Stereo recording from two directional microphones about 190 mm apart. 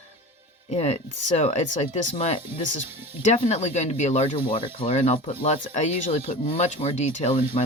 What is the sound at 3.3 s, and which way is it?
Speech, 35° left (ahead or behind).